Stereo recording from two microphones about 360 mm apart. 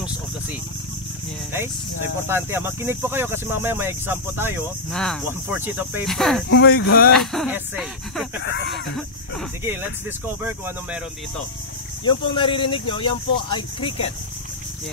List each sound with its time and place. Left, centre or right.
2.2 s speech: centre
6.5 s speech: left
7.2 s speech: centre
12.0 s speech: centre